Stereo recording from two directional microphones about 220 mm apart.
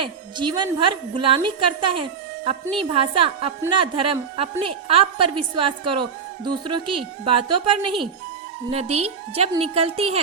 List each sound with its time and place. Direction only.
0.0 s a woman's voice: 20° right (ahead or behind)